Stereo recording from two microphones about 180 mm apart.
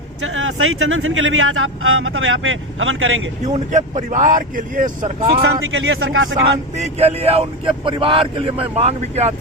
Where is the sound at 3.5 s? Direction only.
40° right (ahead or behind).